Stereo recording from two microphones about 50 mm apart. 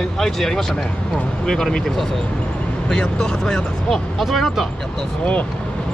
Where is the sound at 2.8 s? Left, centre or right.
Centre.